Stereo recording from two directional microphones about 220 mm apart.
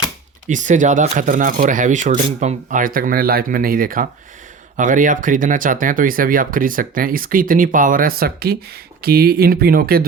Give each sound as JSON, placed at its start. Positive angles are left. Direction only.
{"t": 0.4, "sound": "speech", "side_deg": -35}